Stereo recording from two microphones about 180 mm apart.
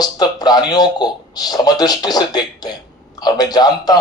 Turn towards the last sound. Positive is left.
turn(degrees=20)  # may be behind; listen again after turning